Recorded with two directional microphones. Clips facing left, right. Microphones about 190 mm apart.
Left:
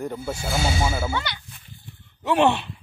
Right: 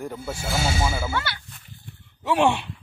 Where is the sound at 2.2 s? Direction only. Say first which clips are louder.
Left 1 dB; 5° right (ahead or behind).